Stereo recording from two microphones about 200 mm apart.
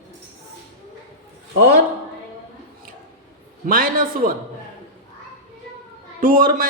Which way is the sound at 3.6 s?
45° right (ahead or behind).